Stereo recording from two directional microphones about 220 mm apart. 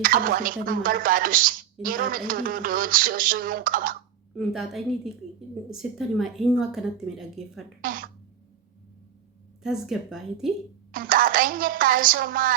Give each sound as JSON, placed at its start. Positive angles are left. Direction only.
{"t": 0.0, "sound": "a woman's voice", "side_deg": -40}
{"t": 4.4, "sound": "a woman's voice", "side_deg": 0}
{"t": 7.8, "sound": "throat clearing", "side_deg": -40}
{"t": 9.6, "sound": "a woman's voice", "side_deg": 0}
{"t": 10.9, "sound": "a woman's voice", "side_deg": -40}